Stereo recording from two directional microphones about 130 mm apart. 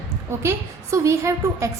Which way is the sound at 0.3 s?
20° right (ahead or behind).